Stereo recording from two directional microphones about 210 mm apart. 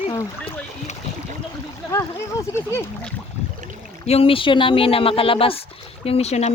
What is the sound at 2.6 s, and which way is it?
Speech, 15° left (ahead or behind).